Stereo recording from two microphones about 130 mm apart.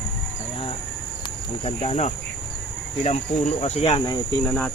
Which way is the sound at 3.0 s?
60° left (ahead or behind).